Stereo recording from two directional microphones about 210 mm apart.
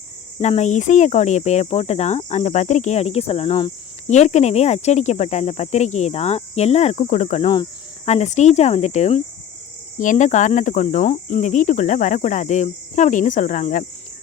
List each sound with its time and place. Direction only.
0.3 s speech: 30° left (ahead or behind)